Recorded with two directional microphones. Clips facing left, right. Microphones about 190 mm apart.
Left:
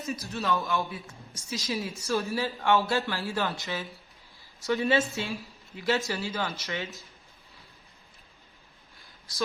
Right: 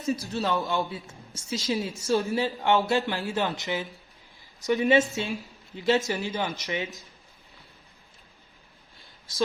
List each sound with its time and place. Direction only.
0.1 s a man's voice: 35° right (ahead or behind)
0.5 s a woman's voice: 20° right (ahead or behind)